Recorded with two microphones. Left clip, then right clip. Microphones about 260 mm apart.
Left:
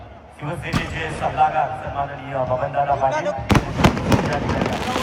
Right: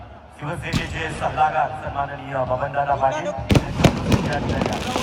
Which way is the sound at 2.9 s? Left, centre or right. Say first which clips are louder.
Left 1 dB; right.